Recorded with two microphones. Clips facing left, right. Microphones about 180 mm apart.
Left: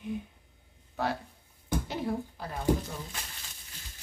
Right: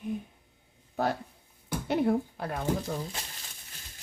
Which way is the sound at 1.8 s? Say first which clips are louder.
Right 7 dB; 60° right (ahead or behind).